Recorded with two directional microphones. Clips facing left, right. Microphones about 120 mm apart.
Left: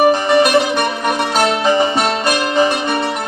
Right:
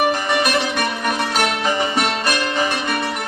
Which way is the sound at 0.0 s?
25° left (ahead or behind).